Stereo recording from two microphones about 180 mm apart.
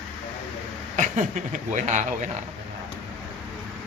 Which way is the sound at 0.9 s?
45° right (ahead or behind).